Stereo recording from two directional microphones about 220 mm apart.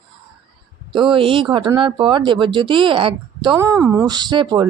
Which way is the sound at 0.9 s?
20° right (ahead or behind).